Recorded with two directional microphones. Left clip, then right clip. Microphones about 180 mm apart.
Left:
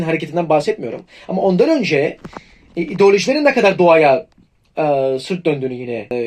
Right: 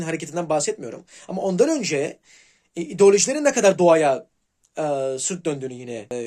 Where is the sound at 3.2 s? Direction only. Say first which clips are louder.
Left 5 dB; 35° right (ahead or behind).